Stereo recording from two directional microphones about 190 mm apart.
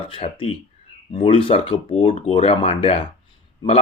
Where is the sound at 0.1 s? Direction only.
30° left (ahead or behind).